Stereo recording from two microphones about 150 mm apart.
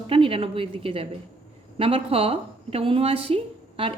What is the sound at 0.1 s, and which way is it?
A woman's voice, 35° right (ahead or behind).